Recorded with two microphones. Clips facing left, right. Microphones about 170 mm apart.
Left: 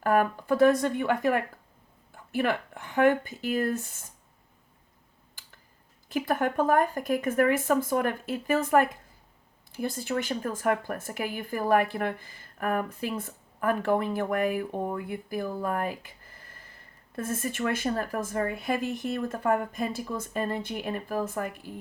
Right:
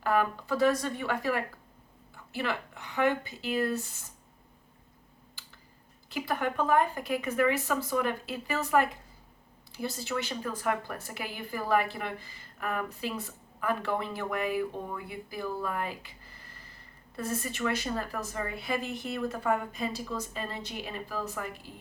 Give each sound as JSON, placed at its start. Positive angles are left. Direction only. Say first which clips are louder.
{"t": 0.0, "sound": "a woman's voice", "louder": "left 4 dB", "side_deg": 50}
{"t": 6.1, "sound": "a woman's voice", "louder": "left 4 dB", "side_deg": 50}